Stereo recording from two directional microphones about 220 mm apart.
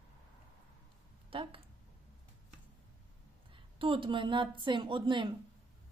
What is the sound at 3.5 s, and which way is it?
A woman's voice, 25° right (ahead or behind).